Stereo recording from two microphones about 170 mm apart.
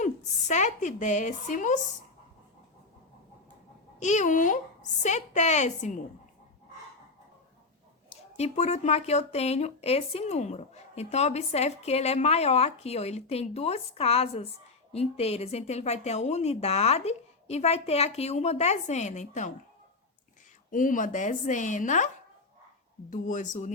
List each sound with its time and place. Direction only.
0.0 s a woman's voice: 45° left (ahead or behind)
4.0 s a woman's voice: 45° left (ahead or behind)
8.1 s speech: 40° left (ahead or behind)
20.7 s a woman's voice: 50° left (ahead or behind)